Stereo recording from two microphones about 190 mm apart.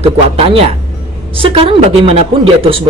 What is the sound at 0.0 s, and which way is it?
Cough, 30° right (ahead or behind).